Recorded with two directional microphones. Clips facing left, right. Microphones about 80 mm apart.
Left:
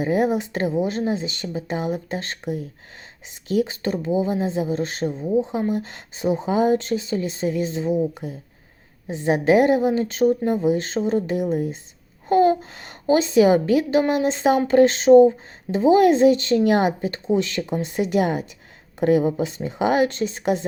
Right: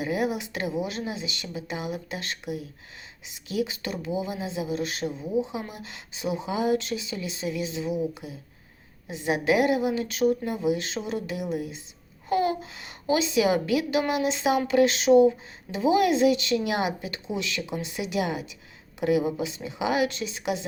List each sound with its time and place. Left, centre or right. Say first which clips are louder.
0.0 s a woman's voice: left 7 dB; left